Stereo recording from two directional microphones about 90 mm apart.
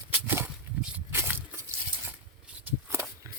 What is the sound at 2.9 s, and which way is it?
Shuffling cards, 35° right (ahead or behind).